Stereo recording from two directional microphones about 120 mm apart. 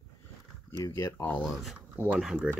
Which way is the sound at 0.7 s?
25° left (ahead or behind).